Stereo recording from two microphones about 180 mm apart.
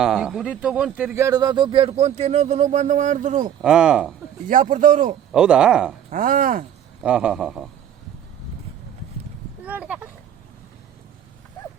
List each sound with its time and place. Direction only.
0.0 s speech: 5° right (ahead or behind); by 3.5 s 45° right (ahead or behind)
3.6 s a man's voice: 5° right (ahead or behind)
4.7 s speech: 45° right (ahead or behind)
5.3 s a man's voice: 5° right (ahead or behind)
6.1 s speech: 50° right (ahead or behind)
7.0 s a man's voice: 5° right (ahead or behind)
9.6 s a sound: 10° right (ahead or behind)